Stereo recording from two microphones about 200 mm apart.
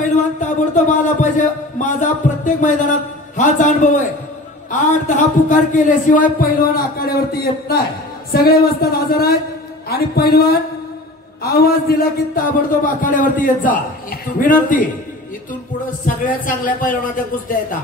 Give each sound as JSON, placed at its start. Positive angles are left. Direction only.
{"t": 0.4, "sound": "a man's voice", "side_deg": 40}
{"t": 8.3, "sound": "a man's voice", "side_deg": 50}
{"t": 16.1, "sound": "a man's voice", "side_deg": 45}